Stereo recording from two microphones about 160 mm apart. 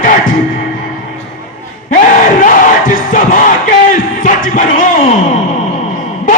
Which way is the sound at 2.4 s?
55° left (ahead or behind).